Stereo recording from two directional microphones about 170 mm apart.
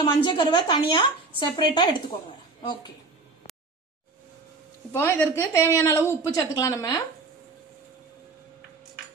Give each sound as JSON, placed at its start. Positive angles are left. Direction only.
{"t": 0.0, "sound": "a woman's voice", "side_deg": 25}
{"t": 4.9, "sound": "a woman's voice", "side_deg": 15}